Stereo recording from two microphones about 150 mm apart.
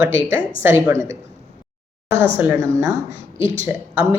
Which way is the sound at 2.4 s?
20° right (ahead or behind).